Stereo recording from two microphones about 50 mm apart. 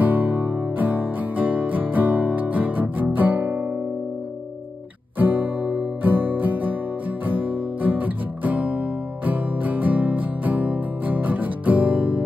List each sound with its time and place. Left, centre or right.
0.0 s music: right
5.2 s music: right